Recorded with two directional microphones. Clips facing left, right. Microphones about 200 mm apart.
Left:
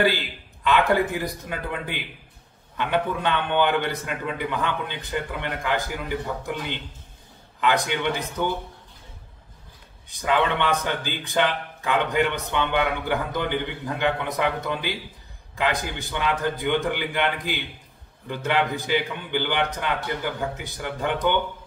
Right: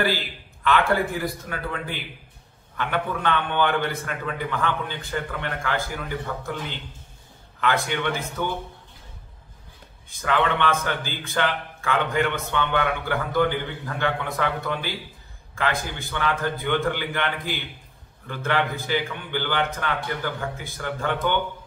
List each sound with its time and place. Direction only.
0.7 s a man's voice: 15° left (ahead or behind)
7.6 s a man's voice: 15° left (ahead or behind)
10.0 s a man's voice: 15° left (ahead or behind)